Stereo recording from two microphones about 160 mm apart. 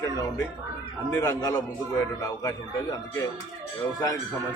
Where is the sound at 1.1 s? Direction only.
20° left (ahead or behind).